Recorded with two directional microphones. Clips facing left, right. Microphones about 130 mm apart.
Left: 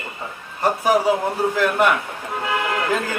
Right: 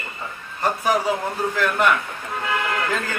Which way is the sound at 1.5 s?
15° left (ahead or behind).